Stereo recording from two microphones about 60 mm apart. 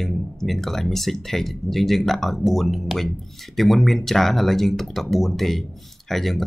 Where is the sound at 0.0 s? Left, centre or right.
Centre.